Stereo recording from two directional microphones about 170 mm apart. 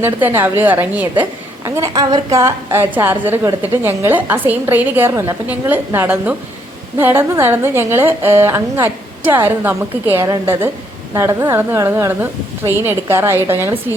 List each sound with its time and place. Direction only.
0.0 s a woman's voice: 10° right (ahead or behind)